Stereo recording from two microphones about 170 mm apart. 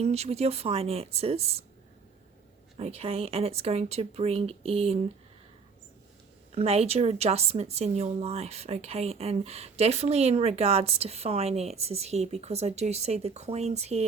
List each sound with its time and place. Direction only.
0.0 s a woman's voice: 40° right (ahead or behind)
2.7 s a woman's voice: 35° right (ahead or behind)
6.5 s a woman's voice: 35° right (ahead or behind)